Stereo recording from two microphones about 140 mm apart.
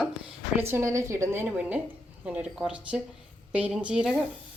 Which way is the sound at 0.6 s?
20° right (ahead or behind).